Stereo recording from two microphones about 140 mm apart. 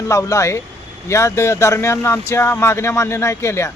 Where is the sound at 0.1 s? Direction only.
20° left (ahead or behind).